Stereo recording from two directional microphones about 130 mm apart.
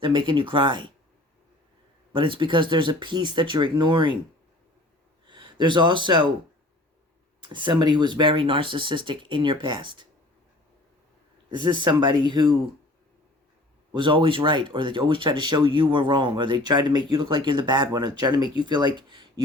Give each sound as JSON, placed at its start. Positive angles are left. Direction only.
{"t": 0.0, "sound": "speech", "side_deg": -40}
{"t": 2.1, "sound": "speech", "side_deg": -40}
{"t": 5.3, "sound": "speech", "side_deg": -35}
{"t": 7.4, "sound": "speech", "side_deg": -35}
{"t": 11.5, "sound": "speech", "side_deg": -35}
{"t": 13.9, "sound": "speech", "side_deg": -40}